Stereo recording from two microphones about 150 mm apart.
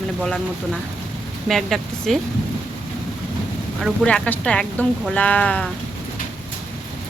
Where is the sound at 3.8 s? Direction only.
5° left (ahead or behind).